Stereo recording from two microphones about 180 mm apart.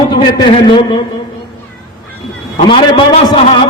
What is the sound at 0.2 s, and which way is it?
Speech, 25° left (ahead or behind).